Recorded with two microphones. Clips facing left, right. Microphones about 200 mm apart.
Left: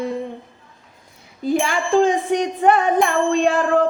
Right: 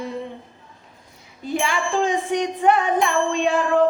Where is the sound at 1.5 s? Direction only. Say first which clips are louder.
Left 5 dB; 40° left (ahead or behind).